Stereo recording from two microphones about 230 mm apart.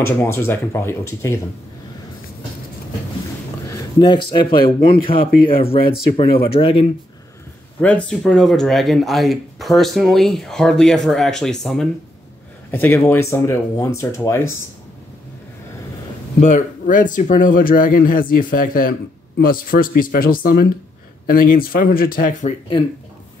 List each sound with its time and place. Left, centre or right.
0.0 s speech: centre
3.7 s speech: centre
7.8 s speech: centre
16.3 s speech: left